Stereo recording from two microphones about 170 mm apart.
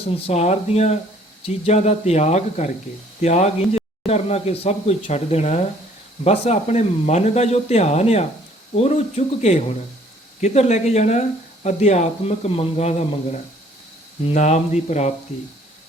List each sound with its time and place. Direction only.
0.3 s speech: 40° left (ahead or behind)